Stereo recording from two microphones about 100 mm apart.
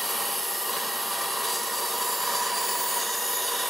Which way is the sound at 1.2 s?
Centre (ahead or behind).